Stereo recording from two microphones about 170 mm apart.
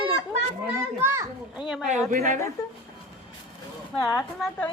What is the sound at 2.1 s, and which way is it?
Speech, 50° right (ahead or behind).